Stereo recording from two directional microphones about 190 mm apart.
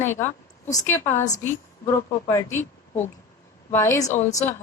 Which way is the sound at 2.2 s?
15° left (ahead or behind).